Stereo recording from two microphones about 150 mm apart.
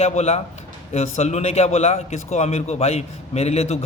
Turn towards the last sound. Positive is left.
turn(degrees=45)  # may be behind; listen again after turning